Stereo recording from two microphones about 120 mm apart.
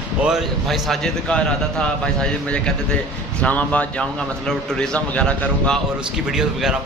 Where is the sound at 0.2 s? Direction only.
5° right (ahead or behind).